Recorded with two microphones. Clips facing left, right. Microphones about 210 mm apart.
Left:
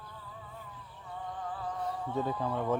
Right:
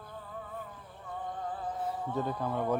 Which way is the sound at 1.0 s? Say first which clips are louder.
Right 2 dB; 45° right (ahead or behind).